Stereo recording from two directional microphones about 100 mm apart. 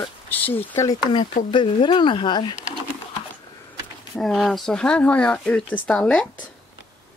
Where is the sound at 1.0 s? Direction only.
50° left (ahead or behind).